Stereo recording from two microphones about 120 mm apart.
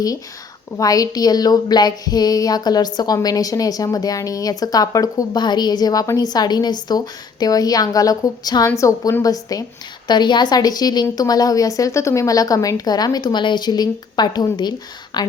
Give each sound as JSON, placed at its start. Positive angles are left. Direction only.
{"t": 0.8, "sound": "speech", "side_deg": 30}